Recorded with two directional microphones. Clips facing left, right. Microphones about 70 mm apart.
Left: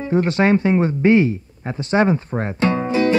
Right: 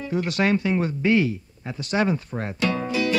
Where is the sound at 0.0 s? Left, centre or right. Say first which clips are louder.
Left 6 dB; left.